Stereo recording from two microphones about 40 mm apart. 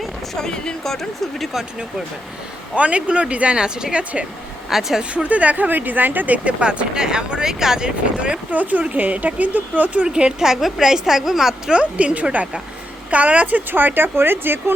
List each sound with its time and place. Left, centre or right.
0.3 s speech: centre
0.9 s speech: centre
2.7 s speech: right
3.6 s speech: centre
4.7 s a woman's voice: centre
5.1 s speech: right
6.6 s speech: right
7.4 s a woman's voice: centre
8.4 s speech: right
10.1 s speech: right
10.4 s a woman's voice: centre
11.7 s speech: right
13.7 s speech: right